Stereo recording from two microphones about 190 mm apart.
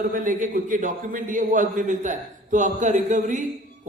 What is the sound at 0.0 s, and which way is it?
A man's voice, 45° right (ahead or behind).